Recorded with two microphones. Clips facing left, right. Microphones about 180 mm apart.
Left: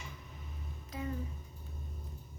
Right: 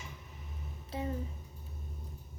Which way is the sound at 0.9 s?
30° right (ahead or behind).